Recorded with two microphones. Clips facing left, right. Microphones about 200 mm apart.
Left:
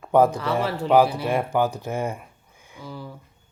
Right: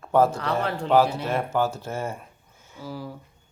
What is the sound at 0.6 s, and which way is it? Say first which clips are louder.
Speech: left 2 dB; 10° left (ahead or behind).